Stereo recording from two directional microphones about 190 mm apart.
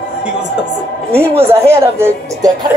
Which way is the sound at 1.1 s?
10° right (ahead or behind).